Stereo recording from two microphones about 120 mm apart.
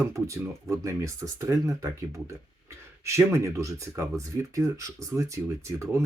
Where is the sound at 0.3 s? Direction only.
25° right (ahead or behind).